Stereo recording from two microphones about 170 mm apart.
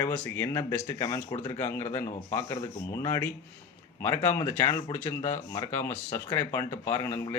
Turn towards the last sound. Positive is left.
turn(degrees=15)  # may be behind; listen again after turning